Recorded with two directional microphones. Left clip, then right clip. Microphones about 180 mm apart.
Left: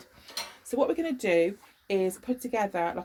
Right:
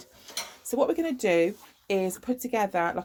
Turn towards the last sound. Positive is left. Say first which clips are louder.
# right 2 dB
turn(degrees=-40)  # may be behind; listen again after turning